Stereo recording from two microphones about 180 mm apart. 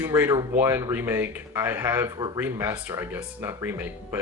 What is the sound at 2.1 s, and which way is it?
Speech, 20° right (ahead or behind).